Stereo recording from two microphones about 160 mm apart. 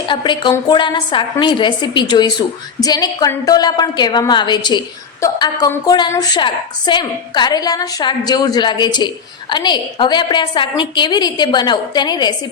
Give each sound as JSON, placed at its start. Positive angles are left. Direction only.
{"t": 0.1, "sound": "a woman's voice", "side_deg": 30}